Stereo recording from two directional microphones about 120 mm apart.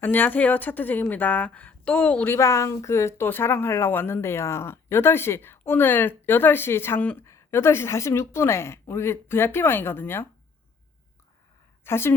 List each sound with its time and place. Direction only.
0.0 s a woman's voice: 15° left (ahead or behind)
11.9 s a woman's voice: 20° left (ahead or behind)